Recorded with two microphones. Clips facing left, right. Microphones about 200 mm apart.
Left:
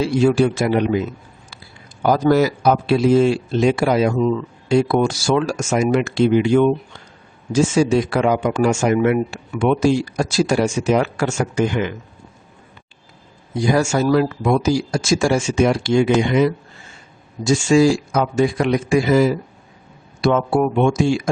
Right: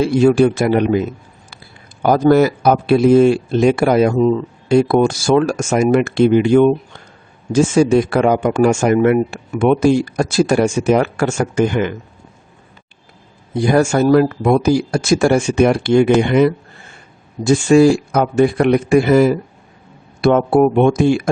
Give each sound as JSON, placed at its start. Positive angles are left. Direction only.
{"t": 0.0, "sound": "speech", "side_deg": -55}
{"t": 4.2, "sound": "speech", "side_deg": -30}
{"t": 4.7, "sound": "speech", "side_deg": -55}
{"t": 13.5, "sound": "speech", "side_deg": -60}